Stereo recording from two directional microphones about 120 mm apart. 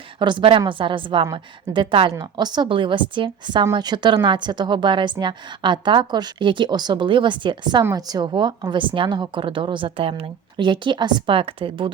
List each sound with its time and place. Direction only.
0.2 s a woman's voice: 40° right (ahead or behind)
2.1 s a woman's voice: 35° right (ahead or behind)